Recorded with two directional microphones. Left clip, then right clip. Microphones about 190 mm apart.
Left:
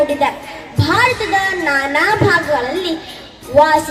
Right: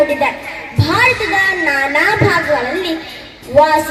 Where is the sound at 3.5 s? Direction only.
20° right (ahead or behind).